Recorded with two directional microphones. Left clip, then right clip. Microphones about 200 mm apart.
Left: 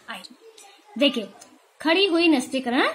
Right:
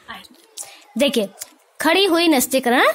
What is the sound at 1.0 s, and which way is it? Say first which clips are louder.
A woman's voice: right 4 dB; 55° right (ahead or behind).